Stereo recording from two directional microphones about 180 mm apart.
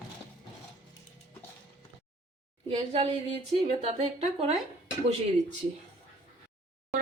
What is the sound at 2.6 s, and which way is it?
A woman's voice, 35° right (ahead or behind).